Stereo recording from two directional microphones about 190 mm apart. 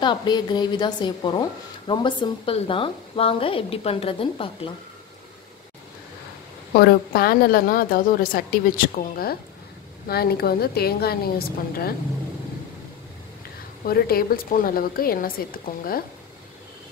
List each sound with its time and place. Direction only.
0.0 s a woman's voice: 25° left (ahead or behind)
6.7 s a woman's voice: 55° left (ahead or behind)
13.8 s a woman's voice: 50° left (ahead or behind)